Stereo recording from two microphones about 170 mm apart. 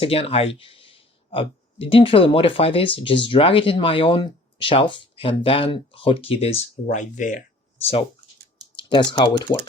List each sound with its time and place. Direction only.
0.0 s speech: 35° left (ahead or behind)
6.8 s speech: 50° left (ahead or behind)
8.7 s speech: 25° left (ahead or behind)